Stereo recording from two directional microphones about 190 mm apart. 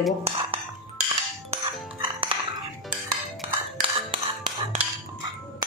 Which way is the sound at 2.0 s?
25° right (ahead or behind).